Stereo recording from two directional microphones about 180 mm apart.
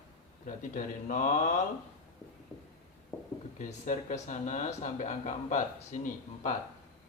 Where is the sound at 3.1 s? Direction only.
10° left (ahead or behind).